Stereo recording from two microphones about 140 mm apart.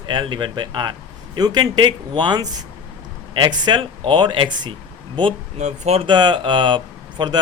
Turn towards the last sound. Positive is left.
turn(degrees=-30)  # may be behind; listen again after turning